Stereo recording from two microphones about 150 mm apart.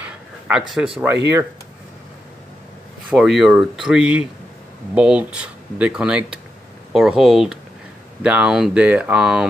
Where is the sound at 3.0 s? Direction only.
5° right (ahead or behind).